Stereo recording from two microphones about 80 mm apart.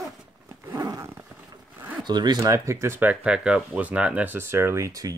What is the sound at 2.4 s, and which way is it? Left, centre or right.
Speech, right.